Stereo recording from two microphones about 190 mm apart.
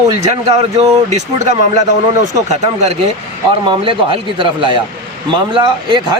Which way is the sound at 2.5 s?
35° right (ahead or behind).